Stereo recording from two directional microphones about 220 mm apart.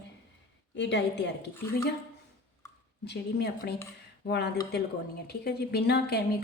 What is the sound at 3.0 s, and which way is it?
A woman's voice, 50° left (ahead or behind).